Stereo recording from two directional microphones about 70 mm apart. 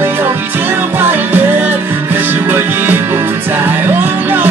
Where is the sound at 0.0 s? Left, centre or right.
Right.